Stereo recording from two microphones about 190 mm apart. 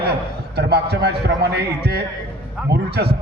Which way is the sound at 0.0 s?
60° right (ahead or behind).